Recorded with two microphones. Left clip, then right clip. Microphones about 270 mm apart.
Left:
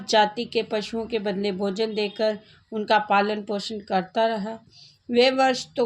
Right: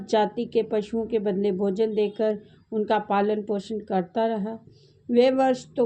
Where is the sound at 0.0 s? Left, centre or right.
Centre.